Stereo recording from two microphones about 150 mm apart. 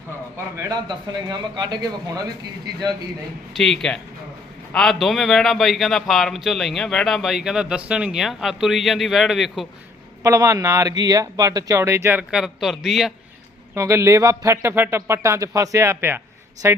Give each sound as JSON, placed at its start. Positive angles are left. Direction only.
{"t": 0.5, "sound": "speech", "side_deg": -20}
{"t": 3.6, "sound": "a man's voice", "side_deg": 0}
{"t": 10.2, "sound": "speech", "side_deg": -20}
{"t": 12.3, "sound": "a man's voice", "side_deg": 0}
{"t": 13.7, "sound": "a woman's voice", "side_deg": -20}